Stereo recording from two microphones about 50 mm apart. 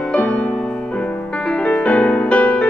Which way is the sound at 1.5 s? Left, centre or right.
Left.